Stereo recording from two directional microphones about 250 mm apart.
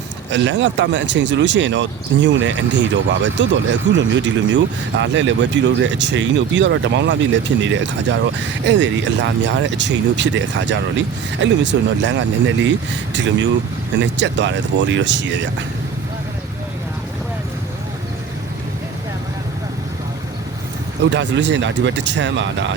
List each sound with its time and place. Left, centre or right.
0.3 s speech: right
21.0 s speech: right